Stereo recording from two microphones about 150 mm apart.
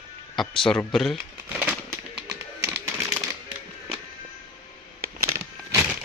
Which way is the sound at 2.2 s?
15° right (ahead or behind).